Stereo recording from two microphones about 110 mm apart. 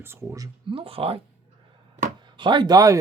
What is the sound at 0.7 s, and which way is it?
Speech, 55° right (ahead or behind).